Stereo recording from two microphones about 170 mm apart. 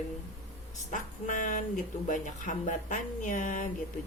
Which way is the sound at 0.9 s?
50° left (ahead or behind).